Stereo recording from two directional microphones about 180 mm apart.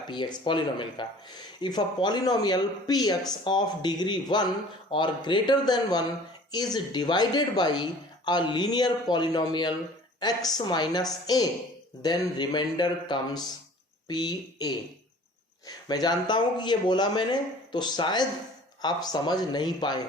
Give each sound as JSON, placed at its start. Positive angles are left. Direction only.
{"t": 0.1, "sound": "speech", "side_deg": 25}